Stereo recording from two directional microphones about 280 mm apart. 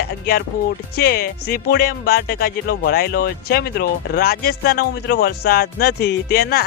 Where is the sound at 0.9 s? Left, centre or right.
Left.